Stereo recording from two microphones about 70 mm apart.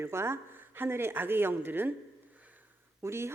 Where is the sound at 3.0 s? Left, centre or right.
Right.